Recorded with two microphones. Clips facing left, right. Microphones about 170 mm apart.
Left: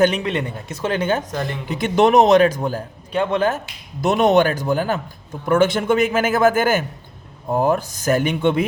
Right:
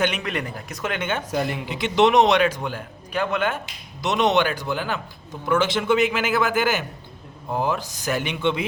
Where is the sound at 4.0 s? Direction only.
50° left (ahead or behind).